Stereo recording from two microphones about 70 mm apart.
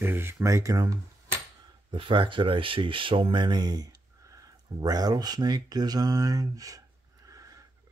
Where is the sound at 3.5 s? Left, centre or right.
Right.